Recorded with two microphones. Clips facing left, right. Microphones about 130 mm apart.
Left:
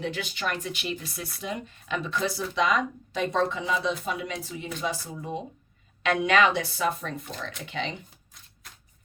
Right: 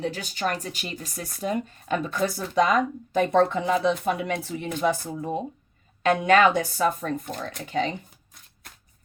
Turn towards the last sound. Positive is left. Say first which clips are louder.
# right 6 dB
turn(degrees=-40)  # may be behind; listen again after turning